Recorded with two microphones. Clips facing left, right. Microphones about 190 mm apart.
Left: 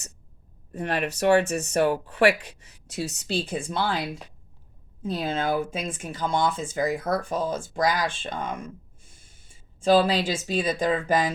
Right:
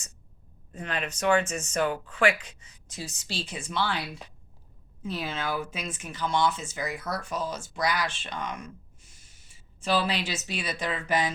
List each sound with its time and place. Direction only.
0.7 s speech: 60° left (ahead or behind)
5.1 s speech: 50° left (ahead or behind)